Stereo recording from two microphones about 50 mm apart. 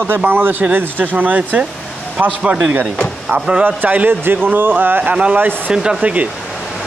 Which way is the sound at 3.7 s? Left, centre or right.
Right.